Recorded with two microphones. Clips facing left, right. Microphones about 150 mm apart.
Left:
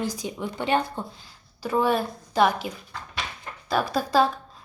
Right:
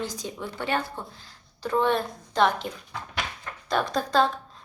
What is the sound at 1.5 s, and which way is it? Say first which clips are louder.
A woman's voice: left 1 dB; 5° left (ahead or behind).